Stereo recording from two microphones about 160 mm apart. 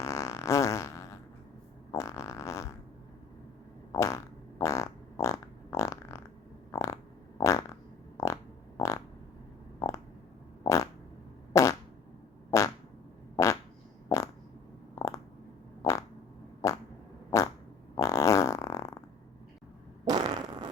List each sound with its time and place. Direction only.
0.0 s fart: 20° left (ahead or behind)
3.9 s fart: 20° left (ahead or behind)
10.6 s fart: 20° left (ahead or behind)
14.9 s a sound: 20° left (ahead or behind)
15.8 s fart: 20° left (ahead or behind)
20.1 s fart: 25° right (ahead or behind)